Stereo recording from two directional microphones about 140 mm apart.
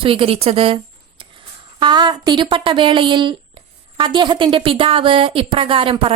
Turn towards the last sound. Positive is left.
turn(degrees=-40)  # may be behind; listen again after turning